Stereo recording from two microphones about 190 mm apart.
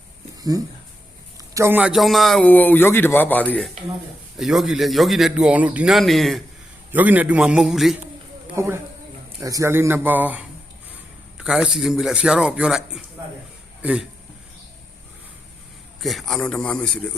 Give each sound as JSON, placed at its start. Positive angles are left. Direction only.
{"t": 0.5, "sound": "a man's voice", "side_deg": -20}
{"t": 4.4, "sound": "speech", "side_deg": 0}
{"t": 8.5, "sound": "speech", "side_deg": -15}
{"t": 16.0, "sound": "speech", "side_deg": 0}